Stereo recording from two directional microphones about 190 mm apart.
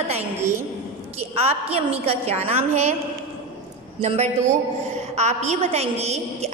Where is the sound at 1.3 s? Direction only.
30° right (ahead or behind).